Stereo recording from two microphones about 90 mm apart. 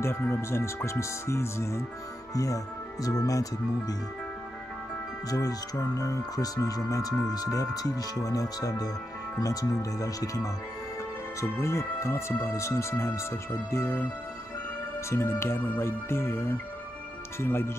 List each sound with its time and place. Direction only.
0.0 s speech: 25° left (ahead or behind); by 3.9 s 45° left (ahead or behind)
5.3 s speech: 40° left (ahead or behind); by 14.0 s 25° left (ahead or behind)
15.0 s speech: 25° left (ahead or behind)